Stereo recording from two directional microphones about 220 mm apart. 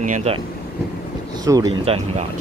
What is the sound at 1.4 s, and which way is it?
Speech, 15° right (ahead or behind).